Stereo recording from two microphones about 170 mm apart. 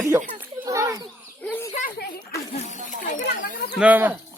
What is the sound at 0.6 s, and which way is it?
Children playing, 20° right (ahead or behind).